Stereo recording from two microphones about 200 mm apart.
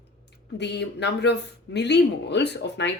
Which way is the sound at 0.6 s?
60° left (ahead or behind).